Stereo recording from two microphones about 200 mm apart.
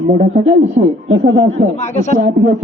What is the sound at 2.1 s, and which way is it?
Speech, 35° right (ahead or behind).